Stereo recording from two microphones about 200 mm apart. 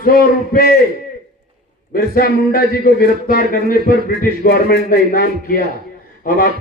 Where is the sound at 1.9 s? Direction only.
50° left (ahead or behind).